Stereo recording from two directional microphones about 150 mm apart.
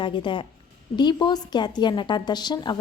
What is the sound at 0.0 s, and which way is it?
A woman's voice, 35° left (ahead or behind).